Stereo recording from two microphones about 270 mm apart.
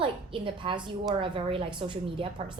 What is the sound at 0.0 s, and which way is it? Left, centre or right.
A woman's voice, centre.